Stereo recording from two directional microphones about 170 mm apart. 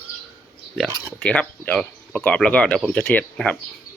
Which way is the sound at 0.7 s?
5° left (ahead or behind).